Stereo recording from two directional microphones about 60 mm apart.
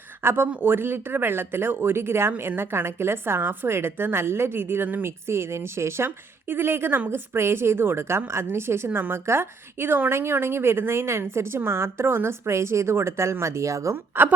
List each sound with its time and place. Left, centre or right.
0.2 s a woman's voice: right
5.0 s a woman's voice: right
6.5 s a woman's voice: right
13.9 s a woman's voice: right